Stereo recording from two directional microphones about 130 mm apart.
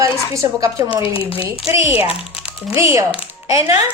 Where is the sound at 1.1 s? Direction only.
45° left (ahead or behind).